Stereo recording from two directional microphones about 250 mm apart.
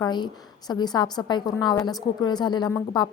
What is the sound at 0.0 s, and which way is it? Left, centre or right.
A woman's voice, centre.